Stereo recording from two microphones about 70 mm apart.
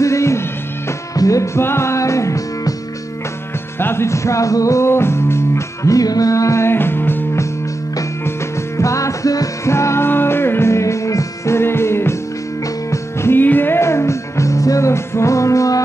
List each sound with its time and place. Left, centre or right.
0.0 s music: left
3.8 s music: left
5.9 s music: left
8.7 s music: left
9.7 s music: left